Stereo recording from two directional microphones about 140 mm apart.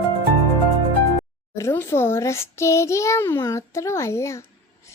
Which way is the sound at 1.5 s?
20° left (ahead or behind).